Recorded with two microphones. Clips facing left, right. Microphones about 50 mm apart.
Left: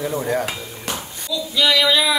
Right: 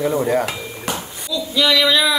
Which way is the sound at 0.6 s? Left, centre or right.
Right.